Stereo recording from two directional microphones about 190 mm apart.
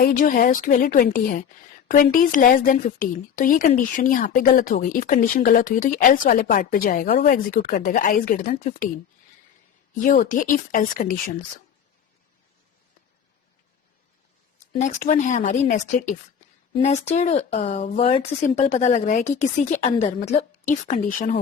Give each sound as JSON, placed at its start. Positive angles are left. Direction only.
{"t": 0.0, "sound": "speech", "side_deg": 45}
{"t": 10.0, "sound": "speech", "side_deg": 45}
{"t": 14.8, "sound": "speech", "side_deg": 40}